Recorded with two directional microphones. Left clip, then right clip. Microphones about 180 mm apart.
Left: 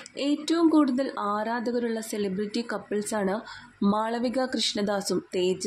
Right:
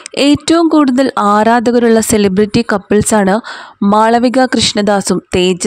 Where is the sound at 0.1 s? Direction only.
65° right (ahead or behind).